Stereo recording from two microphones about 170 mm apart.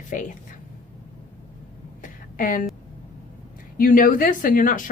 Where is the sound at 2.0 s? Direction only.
50° left (ahead or behind).